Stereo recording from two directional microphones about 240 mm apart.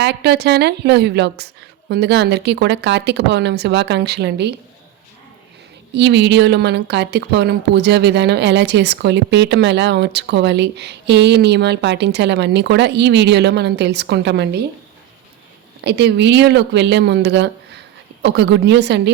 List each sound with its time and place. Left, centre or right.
0.0 s speech: right
5.9 s speech: right
15.8 s speech: right